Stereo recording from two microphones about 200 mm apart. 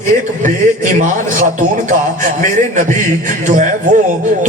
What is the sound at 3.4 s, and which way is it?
Speech, 40° right (ahead or behind).